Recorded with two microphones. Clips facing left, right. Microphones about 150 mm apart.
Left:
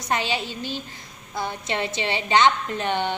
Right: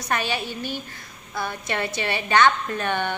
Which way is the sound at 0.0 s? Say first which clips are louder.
Left 1 dB; 20° left (ahead or behind).